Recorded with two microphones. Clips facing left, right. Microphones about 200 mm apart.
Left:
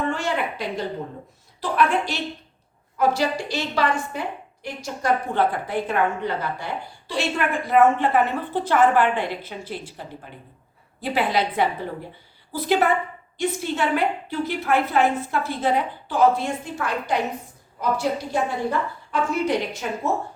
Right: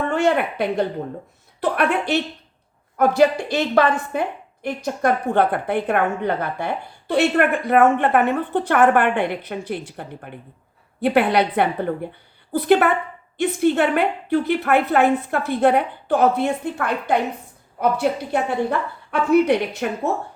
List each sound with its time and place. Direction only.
0.1 s a woman's voice: 60° right (ahead or behind)